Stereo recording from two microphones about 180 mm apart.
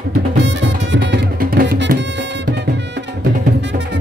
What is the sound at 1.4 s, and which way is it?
Music, 55° right (ahead or behind).